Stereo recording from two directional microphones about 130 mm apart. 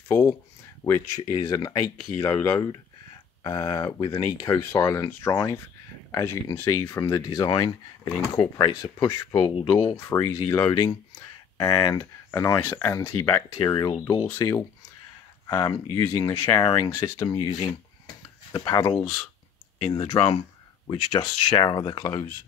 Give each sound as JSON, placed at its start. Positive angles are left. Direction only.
{"t": 0.1, "sound": "speech", "side_deg": 20}
{"t": 7.2, "sound": "speech", "side_deg": 35}
{"t": 8.9, "sound": "speech", "side_deg": 25}
{"t": 14.2, "sound": "speech", "side_deg": 20}
{"t": 20.2, "sound": "a sound", "side_deg": 45}
{"t": 21.2, "sound": "speech", "side_deg": 35}